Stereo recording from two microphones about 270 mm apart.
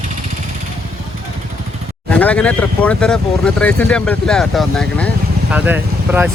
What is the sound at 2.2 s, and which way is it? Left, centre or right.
Speech, centre.